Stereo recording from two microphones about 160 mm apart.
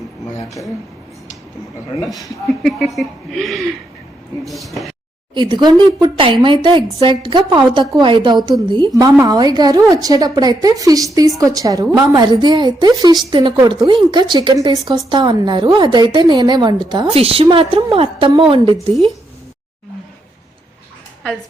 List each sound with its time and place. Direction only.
2.6 s a woman's voice: centre (ahead or behind)
5.3 s a woman's voice: 30° right (ahead or behind)